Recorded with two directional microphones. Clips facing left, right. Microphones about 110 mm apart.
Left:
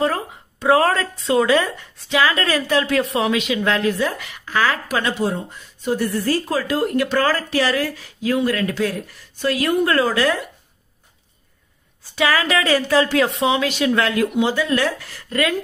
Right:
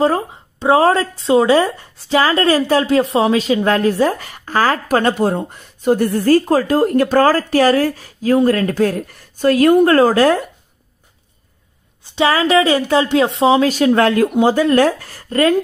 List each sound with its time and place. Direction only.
0.0 s speech: 25° right (ahead or behind); by 10.5 s 45° right (ahead or behind)
12.0 s a woman's voice: 25° right (ahead or behind)